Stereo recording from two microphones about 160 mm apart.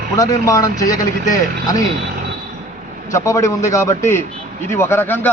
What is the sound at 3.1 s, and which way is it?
A man's voice, 20° left (ahead or behind).